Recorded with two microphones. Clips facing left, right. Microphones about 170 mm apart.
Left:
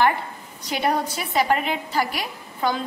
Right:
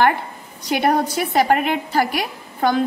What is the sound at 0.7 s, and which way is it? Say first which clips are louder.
A woman's voice: right 5 dB; 55° right (ahead or behind).